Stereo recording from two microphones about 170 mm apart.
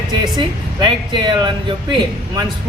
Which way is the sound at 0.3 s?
30° right (ahead or behind).